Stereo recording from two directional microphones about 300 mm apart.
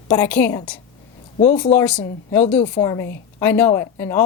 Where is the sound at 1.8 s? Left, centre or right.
Centre.